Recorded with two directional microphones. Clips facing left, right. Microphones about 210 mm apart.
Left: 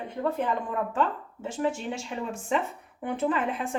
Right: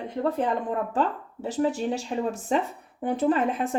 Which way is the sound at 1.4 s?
35° right (ahead or behind).